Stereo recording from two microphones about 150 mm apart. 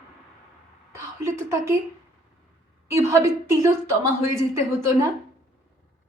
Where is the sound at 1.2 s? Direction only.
20° right (ahead or behind).